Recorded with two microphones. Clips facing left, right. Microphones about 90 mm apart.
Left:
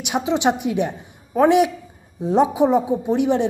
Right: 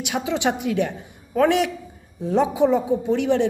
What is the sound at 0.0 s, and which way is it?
A woman's voice, 25° left (ahead or behind).